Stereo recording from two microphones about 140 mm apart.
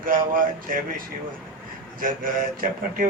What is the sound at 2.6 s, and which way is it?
Speech, 80° right.